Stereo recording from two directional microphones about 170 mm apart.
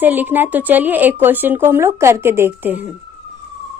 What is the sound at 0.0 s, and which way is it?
A woman's voice, 10° right (ahead or behind).